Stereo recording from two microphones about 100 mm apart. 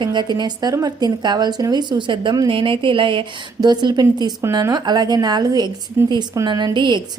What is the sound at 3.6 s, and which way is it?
A woman's voice, 45° right (ahead or behind).